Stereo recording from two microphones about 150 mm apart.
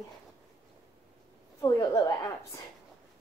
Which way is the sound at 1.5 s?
20° left (ahead or behind).